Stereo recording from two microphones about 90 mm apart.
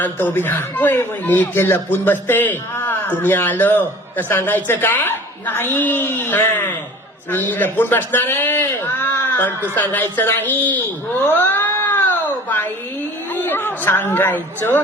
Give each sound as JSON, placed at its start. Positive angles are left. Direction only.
{"t": 0.0, "sound": "a man's voice", "side_deg": 20}
{"t": 11.2, "sound": "cat", "side_deg": 25}
{"t": 13.3, "sound": "a man's voice", "side_deg": 20}